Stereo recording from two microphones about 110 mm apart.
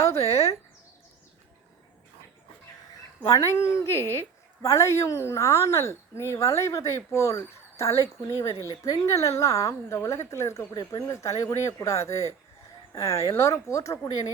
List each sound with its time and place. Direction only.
0.2 s speech: 70° left (ahead or behind)
3.5 s a woman's voice: 25° left (ahead or behind)